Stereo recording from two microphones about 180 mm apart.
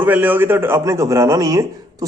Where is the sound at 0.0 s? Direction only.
10° right (ahead or behind).